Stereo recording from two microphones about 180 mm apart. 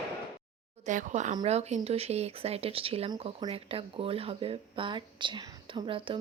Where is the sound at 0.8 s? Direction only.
45° right (ahead or behind).